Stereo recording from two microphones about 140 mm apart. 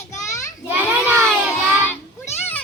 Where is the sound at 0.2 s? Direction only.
20° left (ahead or behind).